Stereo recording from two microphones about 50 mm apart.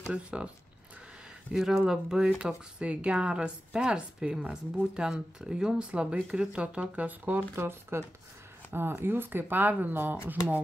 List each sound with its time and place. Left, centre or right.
0.1 s speech: right
1.5 s speech: centre; by 7.4 s right
7.5 s speech: right